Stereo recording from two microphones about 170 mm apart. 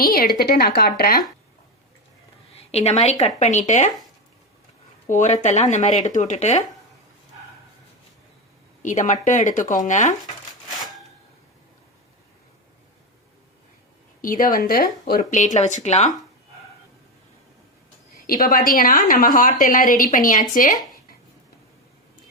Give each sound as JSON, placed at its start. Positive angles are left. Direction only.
{"t": 0.0, "sound": "a woman's voice", "side_deg": 60}
{"t": 2.6, "sound": "a woman's voice", "side_deg": 40}
{"t": 5.0, "sound": "a woman's voice", "side_deg": 45}
{"t": 8.8, "sound": "a woman's voice", "side_deg": 45}
{"t": 14.2, "sound": "a woman's voice", "side_deg": 55}
{"t": 18.3, "sound": "a woman's voice", "side_deg": 55}